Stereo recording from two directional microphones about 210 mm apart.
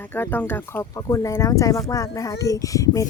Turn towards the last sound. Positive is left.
turn(degrees=15)  # may be behind; listen again after turning